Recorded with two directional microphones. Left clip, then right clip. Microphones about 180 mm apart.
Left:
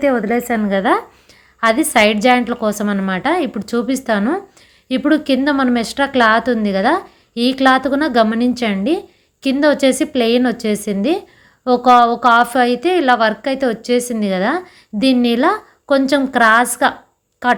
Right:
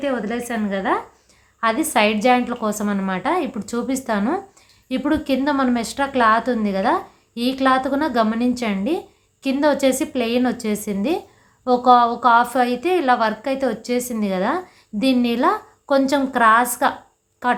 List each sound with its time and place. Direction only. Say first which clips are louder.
0.0 s a woman's voice: left 8 dB; 30° left (ahead or behind)
1.6 s a woman's voice: left 5 dB; 25° left (ahead or behind)